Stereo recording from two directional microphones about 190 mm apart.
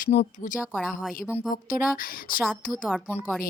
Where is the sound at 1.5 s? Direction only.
45° left (ahead or behind).